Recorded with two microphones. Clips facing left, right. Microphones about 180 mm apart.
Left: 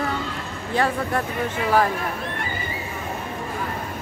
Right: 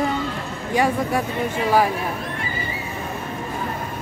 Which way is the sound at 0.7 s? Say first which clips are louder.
Right 2 dB; 10° right (ahead or behind).